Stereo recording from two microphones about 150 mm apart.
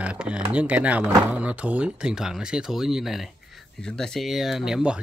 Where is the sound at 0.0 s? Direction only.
5° right (ahead or behind).